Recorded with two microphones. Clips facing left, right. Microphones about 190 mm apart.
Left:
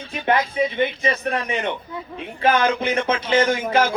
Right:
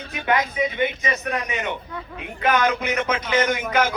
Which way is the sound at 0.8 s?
30° left (ahead or behind).